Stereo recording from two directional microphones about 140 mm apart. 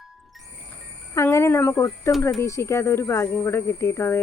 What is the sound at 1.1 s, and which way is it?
Speech, 20° left (ahead or behind).